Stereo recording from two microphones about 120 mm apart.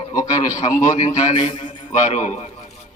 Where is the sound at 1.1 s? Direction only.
70° left (ahead or behind).